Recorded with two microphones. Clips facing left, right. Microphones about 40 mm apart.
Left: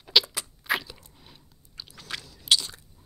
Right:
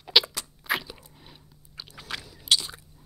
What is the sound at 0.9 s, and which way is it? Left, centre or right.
Chewing, centre.